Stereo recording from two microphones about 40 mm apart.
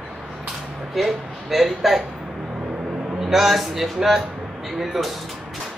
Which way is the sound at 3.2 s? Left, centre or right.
Centre.